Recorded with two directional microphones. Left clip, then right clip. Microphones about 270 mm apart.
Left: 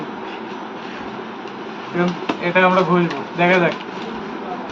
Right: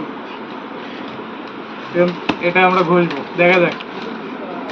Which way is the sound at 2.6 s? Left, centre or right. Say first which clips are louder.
Right 1 dB; centre.